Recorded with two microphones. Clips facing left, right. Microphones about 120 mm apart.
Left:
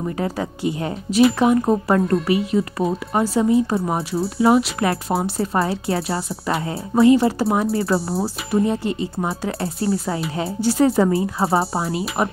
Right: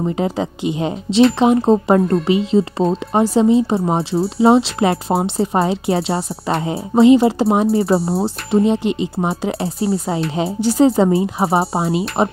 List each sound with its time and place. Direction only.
0.0 s speech: 20° right (ahead or behind)